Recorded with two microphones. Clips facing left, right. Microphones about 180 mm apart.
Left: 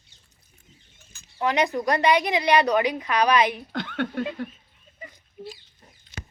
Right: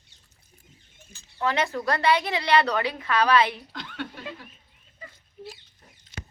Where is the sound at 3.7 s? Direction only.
55° left (ahead or behind).